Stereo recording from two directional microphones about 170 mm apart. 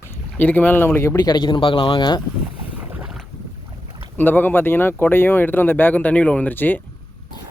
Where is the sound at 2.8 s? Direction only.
5° right (ahead or behind).